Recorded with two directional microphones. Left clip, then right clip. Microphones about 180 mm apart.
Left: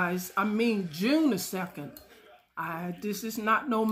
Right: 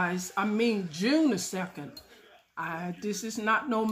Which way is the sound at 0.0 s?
15° left (ahead or behind).